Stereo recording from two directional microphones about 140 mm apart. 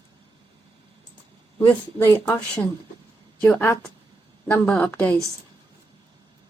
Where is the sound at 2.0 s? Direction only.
15° left (ahead or behind).